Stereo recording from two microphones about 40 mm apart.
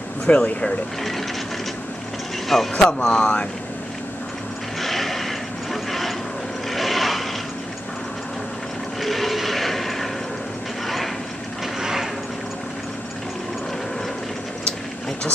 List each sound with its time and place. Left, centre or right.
0.3 s speech: left
2.4 s speech: centre
2.7 s speech: left
4.7 s a sound: centre
6.7 s vehicle: centre
9.0 s toilet flush: centre
11.8 s mechanisms: centre